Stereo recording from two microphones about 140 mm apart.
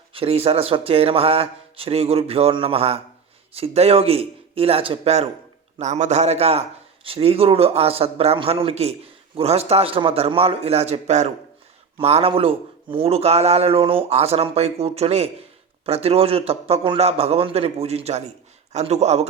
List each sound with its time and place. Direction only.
0.1 s a man's voice: 45° right (ahead or behind)